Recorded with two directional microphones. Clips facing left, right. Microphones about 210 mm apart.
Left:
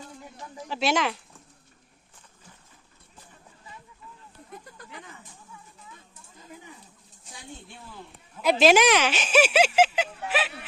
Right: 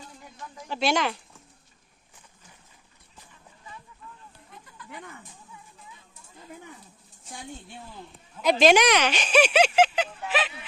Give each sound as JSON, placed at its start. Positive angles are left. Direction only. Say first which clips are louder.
{"t": 0.7, "sound": "speech", "louder": "even", "side_deg": 5}
{"t": 8.4, "sound": "speech", "louder": "even", "side_deg": 5}